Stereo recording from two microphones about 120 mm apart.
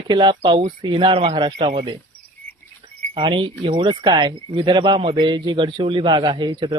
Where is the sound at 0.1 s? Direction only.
40° right (ahead or behind).